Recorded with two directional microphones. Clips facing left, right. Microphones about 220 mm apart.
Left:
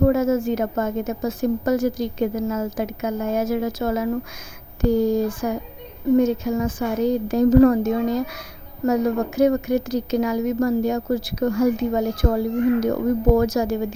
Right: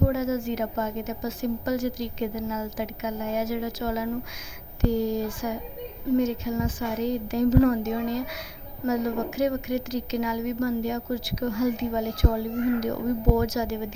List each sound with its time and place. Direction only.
0.0 s a woman's voice: 50° left (ahead or behind)